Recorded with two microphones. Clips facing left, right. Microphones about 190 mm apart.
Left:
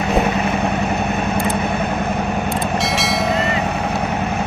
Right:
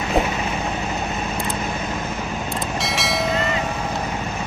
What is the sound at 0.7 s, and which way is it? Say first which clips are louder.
Vehicle: left 6 dB; 60° left (ahead or behind).